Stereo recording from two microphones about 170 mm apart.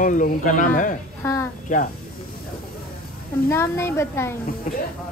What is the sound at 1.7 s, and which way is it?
Speech, 50° left (ahead or behind).